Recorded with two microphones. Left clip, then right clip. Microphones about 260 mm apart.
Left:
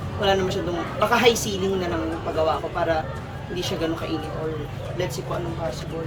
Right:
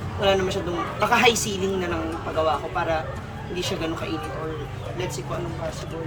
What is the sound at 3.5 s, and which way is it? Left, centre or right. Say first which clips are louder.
Speech: left 1 dB; centre.